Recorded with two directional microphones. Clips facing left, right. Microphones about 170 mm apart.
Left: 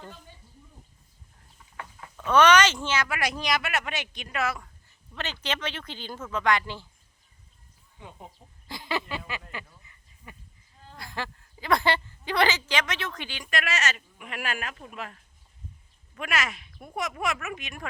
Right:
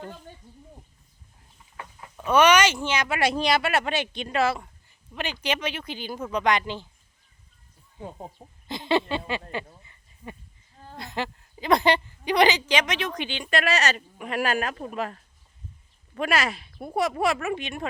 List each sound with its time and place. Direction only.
1.7 s speech: 20° right (ahead or behind)
5.1 s speech: 10° right (ahead or behind)
7.9 s speech: 40° right (ahead or behind)
8.6 s a sound: 25° right (ahead or behind)
10.9 s a woman's voice: 20° right (ahead or behind)